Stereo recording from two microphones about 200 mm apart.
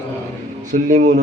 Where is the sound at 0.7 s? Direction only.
40° right (ahead or behind).